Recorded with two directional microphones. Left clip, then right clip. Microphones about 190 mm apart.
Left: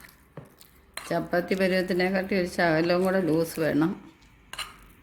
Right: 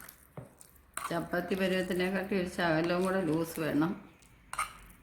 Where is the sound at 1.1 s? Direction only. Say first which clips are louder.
Left 8 dB; 35° left (ahead or behind).